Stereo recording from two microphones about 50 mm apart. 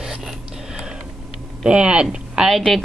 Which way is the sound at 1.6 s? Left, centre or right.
Centre.